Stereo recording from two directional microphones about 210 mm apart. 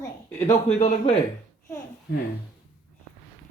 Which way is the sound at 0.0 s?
10° left (ahead or behind).